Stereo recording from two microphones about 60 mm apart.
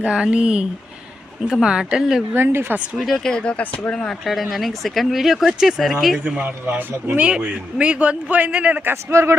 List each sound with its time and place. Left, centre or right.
0.0 s speech: centre
2.3 s speech: right
3.2 s speech: centre
4.3 s speech: centre
6.2 s a man's voice: right
6.7 s speech: right
7.2 s a man's voice: centre
8.9 s speech: right